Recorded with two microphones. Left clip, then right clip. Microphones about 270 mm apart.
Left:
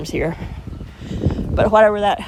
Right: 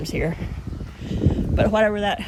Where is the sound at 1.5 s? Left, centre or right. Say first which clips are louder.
Left 7 dB; centre.